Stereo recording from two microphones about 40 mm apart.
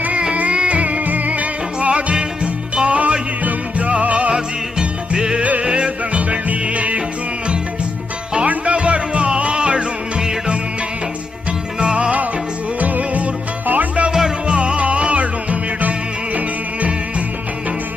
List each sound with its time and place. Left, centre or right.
0.0 s music: right
8.4 s music: right
11.8 s music: right
12.8 s music: right
14.1 s music: centre
14.4 s music: right